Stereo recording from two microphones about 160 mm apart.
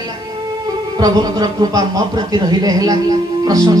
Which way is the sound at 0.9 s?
25° right (ahead or behind).